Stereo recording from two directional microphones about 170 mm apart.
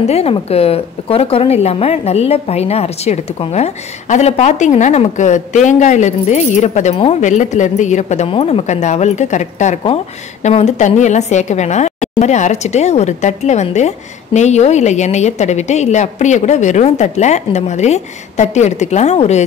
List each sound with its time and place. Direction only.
0.0 s a woman's voice: 35° left (ahead or behind)